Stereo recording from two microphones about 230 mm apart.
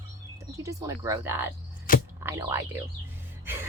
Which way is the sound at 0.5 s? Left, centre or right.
Centre.